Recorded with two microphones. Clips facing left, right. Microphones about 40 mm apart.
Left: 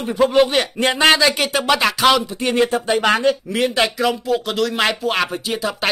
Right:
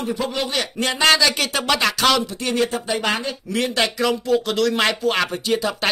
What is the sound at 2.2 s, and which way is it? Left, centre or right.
Speech, left.